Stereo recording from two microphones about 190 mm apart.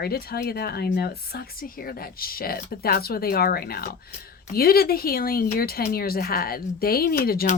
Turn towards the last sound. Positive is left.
turn(degrees=50)  # may be behind; listen again after turning